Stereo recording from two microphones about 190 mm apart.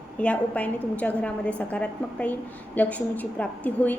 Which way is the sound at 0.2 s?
5° left (ahead or behind).